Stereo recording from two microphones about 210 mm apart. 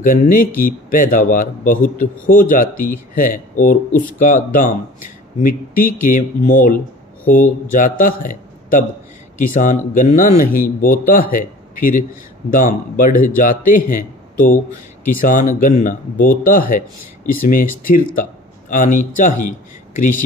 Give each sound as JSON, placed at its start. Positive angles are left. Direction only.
{"t": 0.0, "sound": "a man's voice", "side_deg": 40}
{"t": 15.0, "sound": "a man's voice", "side_deg": 40}